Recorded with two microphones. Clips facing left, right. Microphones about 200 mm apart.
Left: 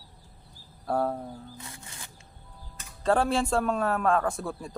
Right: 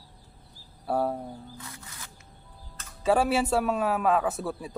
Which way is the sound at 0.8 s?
5° right (ahead or behind).